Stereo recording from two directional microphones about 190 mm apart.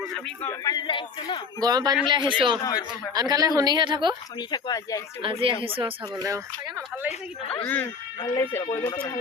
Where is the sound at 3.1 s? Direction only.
20° right (ahead or behind).